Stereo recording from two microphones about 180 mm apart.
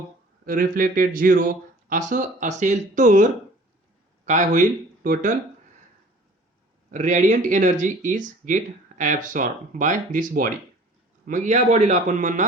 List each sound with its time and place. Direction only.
0.4 s speech: 50° right (ahead or behind)
4.3 s speech: 45° right (ahead or behind)
6.9 s a man's voice: 45° right (ahead or behind)